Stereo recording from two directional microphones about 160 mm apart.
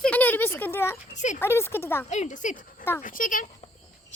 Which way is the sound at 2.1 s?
50° left (ahead or behind).